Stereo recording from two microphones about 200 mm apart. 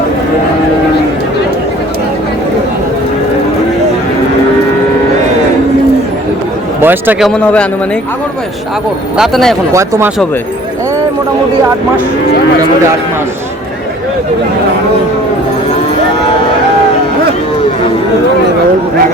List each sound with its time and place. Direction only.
6.8 s a man's voice: 10° right (ahead or behind)
9.1 s a man's voice: centre (ahead or behind)
9.7 s speech: 15° right (ahead or behind)